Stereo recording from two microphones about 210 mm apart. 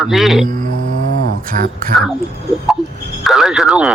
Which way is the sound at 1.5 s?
40° right (ahead or behind).